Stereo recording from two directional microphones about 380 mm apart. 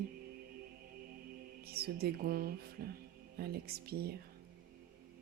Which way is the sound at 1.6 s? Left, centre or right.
Right.